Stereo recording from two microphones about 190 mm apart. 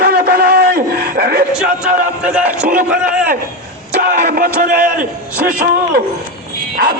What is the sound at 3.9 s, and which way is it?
Speech, 50° right (ahead or behind).